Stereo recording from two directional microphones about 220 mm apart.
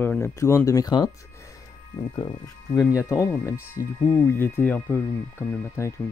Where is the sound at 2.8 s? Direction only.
10° left (ahead or behind).